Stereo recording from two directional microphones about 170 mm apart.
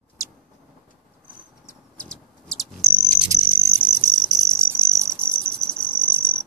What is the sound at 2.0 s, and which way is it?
Cricket, 5° left (ahead or behind).